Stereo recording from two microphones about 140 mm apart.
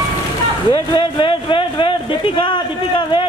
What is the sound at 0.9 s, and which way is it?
A man's voice, 35° left (ahead or behind).